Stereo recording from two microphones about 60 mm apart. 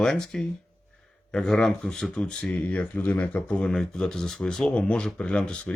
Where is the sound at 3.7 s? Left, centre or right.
Centre.